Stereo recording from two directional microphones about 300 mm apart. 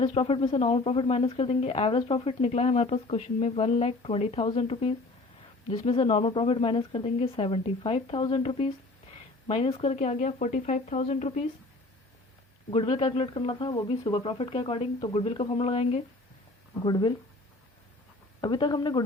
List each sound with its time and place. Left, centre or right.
0.0 s speech: centre
12.7 s speech: centre
18.3 s speech: centre